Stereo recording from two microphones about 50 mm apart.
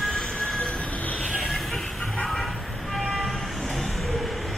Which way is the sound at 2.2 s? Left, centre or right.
Centre.